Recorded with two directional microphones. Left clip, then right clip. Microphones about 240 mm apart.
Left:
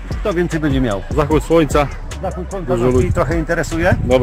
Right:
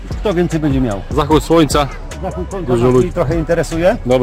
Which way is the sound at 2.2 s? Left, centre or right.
Left.